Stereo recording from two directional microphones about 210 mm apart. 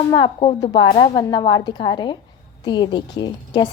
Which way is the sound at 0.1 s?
25° left (ahead or behind).